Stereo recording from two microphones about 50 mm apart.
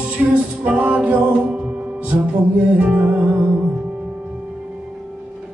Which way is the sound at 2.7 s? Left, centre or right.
Right.